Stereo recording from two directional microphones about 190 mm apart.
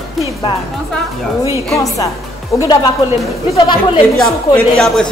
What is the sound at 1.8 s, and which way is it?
A woman's voice, 15° left (ahead or behind).